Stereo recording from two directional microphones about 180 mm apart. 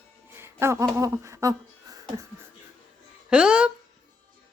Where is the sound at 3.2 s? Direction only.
5° right (ahead or behind).